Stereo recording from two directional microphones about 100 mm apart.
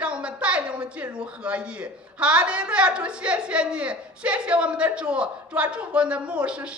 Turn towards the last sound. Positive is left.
turn(degrees=-10)  # may be behind; listen again after turning